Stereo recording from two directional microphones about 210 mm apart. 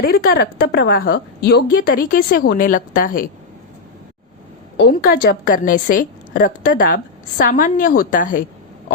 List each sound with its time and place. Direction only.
0.0 s a woman's voice: 45° left (ahead or behind)
4.8 s a woman's voice: 45° left (ahead or behind)